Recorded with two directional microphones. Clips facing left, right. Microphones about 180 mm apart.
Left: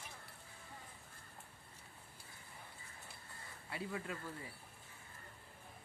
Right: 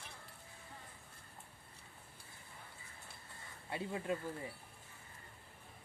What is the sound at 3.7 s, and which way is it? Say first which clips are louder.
Speech: right 5 dB; 25° right (ahead or behind).